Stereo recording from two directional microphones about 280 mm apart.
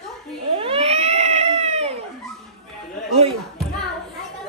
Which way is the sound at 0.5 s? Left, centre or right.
Centre.